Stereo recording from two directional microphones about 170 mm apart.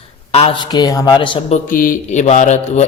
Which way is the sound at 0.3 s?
35° left (ahead or behind).